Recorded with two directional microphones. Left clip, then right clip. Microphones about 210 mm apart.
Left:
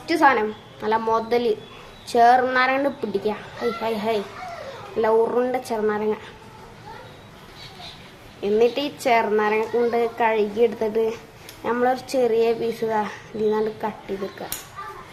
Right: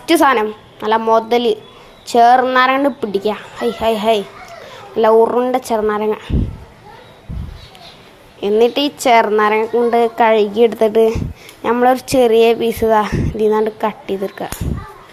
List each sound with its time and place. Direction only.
0.0 s a woman's voice: 40° right (ahead or behind)
8.4 s a woman's voice: 35° right (ahead or behind)